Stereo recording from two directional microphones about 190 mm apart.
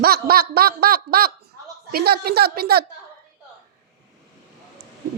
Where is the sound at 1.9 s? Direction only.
55° right (ahead or behind).